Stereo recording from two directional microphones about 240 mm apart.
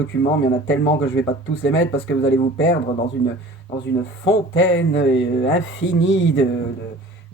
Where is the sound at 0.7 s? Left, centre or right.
Left.